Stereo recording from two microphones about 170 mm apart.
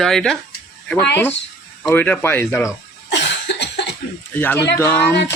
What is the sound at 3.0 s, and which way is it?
Cough, 90° left.